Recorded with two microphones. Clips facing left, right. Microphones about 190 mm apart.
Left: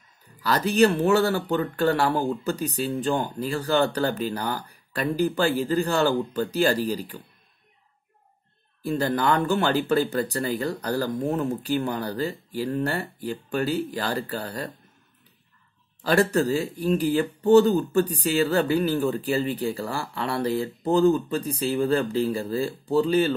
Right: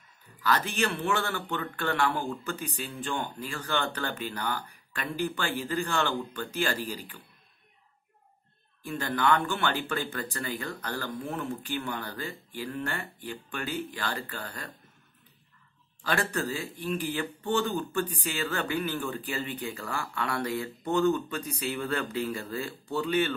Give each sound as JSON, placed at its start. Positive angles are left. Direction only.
{"t": 0.4, "sound": "speech", "side_deg": 35}
{"t": 8.8, "sound": "speech", "side_deg": 35}
{"t": 16.0, "sound": "speech", "side_deg": 35}